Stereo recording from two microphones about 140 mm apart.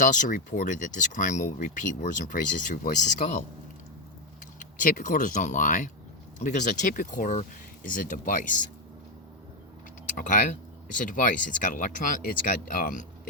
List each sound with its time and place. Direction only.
0.0 s speech: 65° left (ahead or behind)
4.6 s speech: 75° left (ahead or behind)
10.1 s speech: 70° left (ahead or behind)